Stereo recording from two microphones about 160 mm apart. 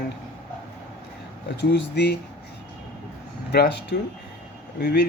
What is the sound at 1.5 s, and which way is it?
Speech, 90° left.